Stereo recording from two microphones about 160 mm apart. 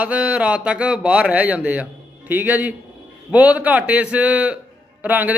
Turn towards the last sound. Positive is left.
turn(degrees=-10)  # may be behind; listen again after turning